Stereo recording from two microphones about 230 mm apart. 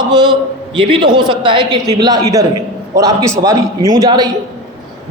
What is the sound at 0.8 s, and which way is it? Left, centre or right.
A man's voice, centre.